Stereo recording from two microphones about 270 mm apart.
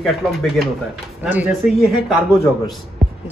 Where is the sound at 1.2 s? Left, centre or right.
Centre.